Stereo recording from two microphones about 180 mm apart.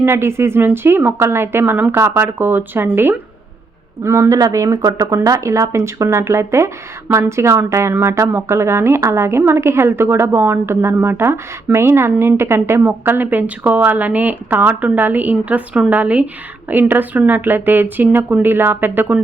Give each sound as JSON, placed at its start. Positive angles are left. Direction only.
{"t": 0.0, "sound": "speech", "side_deg": -15}